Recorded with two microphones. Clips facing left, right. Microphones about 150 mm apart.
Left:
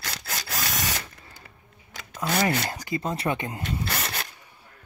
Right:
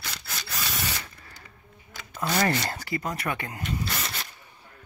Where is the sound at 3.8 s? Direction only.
60° left (ahead or behind).